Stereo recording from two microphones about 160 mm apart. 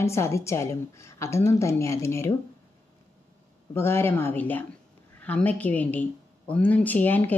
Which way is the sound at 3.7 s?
15° left (ahead or behind).